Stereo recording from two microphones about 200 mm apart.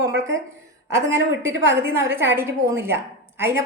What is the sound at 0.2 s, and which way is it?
A woman's voice, 15° right (ahead or behind).